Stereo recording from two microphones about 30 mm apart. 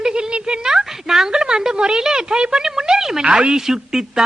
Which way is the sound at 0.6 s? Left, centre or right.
Centre.